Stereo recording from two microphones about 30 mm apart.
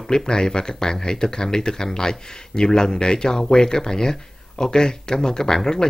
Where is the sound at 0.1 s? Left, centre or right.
Left.